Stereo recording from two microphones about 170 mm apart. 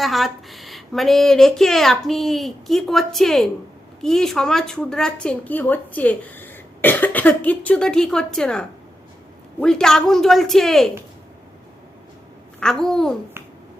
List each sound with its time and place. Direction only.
0.0 s speech: centre (ahead or behind)
12.5 s speech: 5° left (ahead or behind)